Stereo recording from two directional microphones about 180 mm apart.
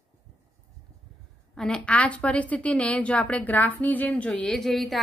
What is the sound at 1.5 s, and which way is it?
A woman's voice, 5° left (ahead or behind).